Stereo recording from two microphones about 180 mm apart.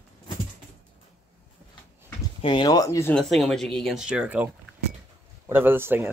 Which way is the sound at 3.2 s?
Centre (ahead or behind).